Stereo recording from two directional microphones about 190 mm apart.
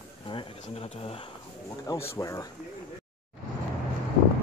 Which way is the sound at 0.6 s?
35° left (ahead or behind).